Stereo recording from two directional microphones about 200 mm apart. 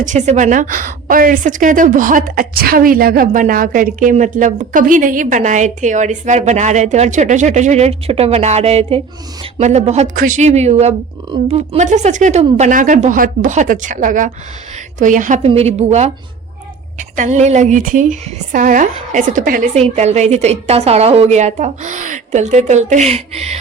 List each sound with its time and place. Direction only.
0.0 s a woman's voice: 35° right (ahead or behind)